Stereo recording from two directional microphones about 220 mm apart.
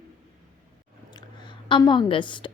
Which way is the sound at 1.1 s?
20° left (ahead or behind).